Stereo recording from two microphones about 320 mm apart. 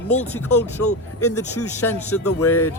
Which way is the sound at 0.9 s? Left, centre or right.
Left.